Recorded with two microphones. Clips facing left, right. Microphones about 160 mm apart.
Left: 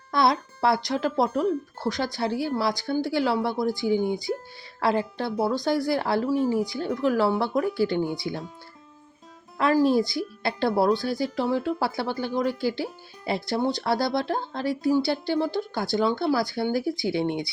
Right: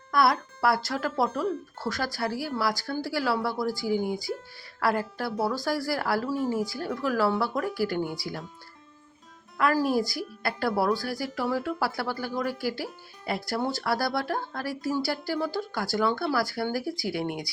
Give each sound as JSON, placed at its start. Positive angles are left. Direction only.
{"t": 0.1, "sound": "speech", "side_deg": 25}
{"t": 9.6, "sound": "speech", "side_deg": 25}